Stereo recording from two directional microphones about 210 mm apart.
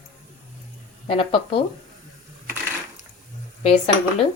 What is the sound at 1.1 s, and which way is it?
Speech, 25° left (ahead or behind).